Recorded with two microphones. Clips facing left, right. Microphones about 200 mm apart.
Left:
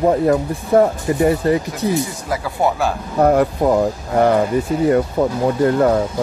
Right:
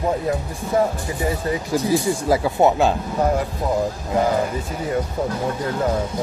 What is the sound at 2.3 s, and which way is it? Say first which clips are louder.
Speech: right 4 dB; 20° right (ahead or behind).